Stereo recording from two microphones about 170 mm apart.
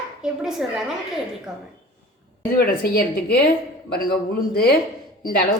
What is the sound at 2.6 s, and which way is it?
A woman's voice, 65° left (ahead or behind).